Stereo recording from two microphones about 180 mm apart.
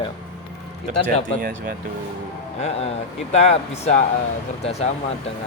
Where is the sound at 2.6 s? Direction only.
35° left (ahead or behind).